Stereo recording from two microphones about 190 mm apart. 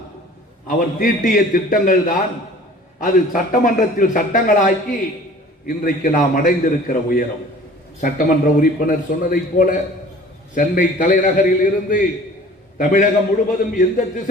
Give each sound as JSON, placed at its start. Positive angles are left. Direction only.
{"t": 0.7, "sound": "a man's voice", "side_deg": 45}